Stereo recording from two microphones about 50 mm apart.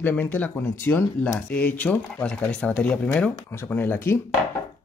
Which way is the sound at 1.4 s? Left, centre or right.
Left.